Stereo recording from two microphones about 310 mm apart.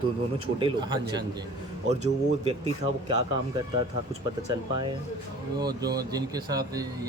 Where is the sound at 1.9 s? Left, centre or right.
Right.